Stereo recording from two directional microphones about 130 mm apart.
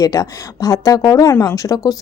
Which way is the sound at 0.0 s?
25° left (ahead or behind).